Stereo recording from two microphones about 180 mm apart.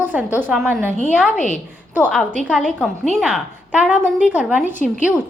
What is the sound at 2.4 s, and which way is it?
A woman's voice, 5° right (ahead or behind).